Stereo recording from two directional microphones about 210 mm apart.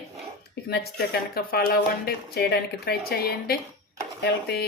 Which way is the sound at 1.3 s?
45° left (ahead or behind).